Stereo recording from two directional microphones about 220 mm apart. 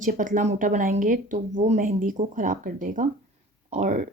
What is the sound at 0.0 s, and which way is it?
Speech, 35° right (ahead or behind).